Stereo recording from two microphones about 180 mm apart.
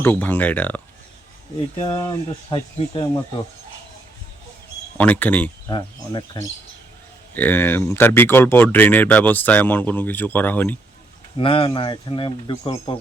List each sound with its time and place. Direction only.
0.0 s speech: 10° left (ahead or behind)
1.8 s speech: 20° left (ahead or behind)
4.9 s speech: 10° left (ahead or behind)
5.7 s speech: 25° left (ahead or behind)
7.3 s speech: 10° left (ahead or behind)
11.3 s speech: 30° left (ahead or behind)